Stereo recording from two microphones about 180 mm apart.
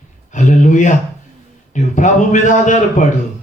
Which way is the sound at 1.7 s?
45° left (ahead or behind).